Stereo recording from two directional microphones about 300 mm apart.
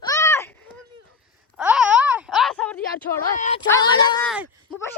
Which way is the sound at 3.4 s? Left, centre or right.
Left.